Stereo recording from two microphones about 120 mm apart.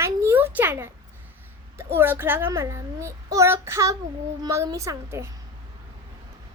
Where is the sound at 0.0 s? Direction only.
20° right (ahead or behind).